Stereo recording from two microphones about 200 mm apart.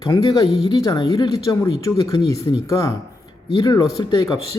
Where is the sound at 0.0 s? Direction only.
20° left (ahead or behind).